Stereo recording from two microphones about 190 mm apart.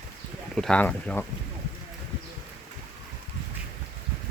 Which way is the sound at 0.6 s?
5° left (ahead or behind).